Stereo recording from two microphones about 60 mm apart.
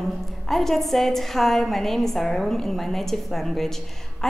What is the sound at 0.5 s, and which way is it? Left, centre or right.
A woman's voice, centre.